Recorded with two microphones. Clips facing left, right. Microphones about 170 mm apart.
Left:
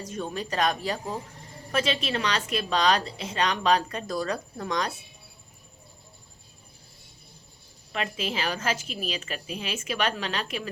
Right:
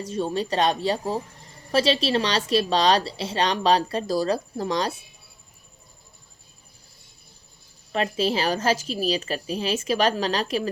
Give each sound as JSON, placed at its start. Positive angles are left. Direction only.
{"t": 0.0, "sound": "a woman's voice", "side_deg": -30}
{"t": 7.9, "sound": "a woman's voice", "side_deg": -35}